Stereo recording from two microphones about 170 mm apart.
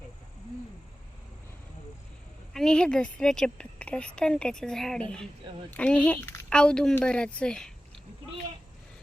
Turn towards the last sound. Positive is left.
turn(degrees=5)  # may be behind; listen again after turning